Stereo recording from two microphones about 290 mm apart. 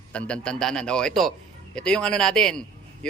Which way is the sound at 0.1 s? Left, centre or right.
Centre.